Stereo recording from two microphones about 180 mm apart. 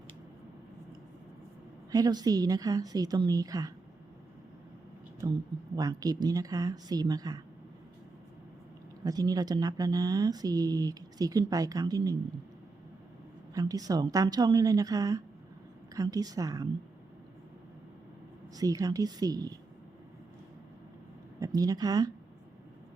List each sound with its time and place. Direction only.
1.9 s speech: 20° right (ahead or behind)
5.7 s speech: 20° right (ahead or behind)
9.0 s speech: 20° right (ahead or behind)
13.5 s speech: 20° right (ahead or behind)
18.5 s speech: 20° right (ahead or behind)
21.3 s speech: 20° right (ahead or behind)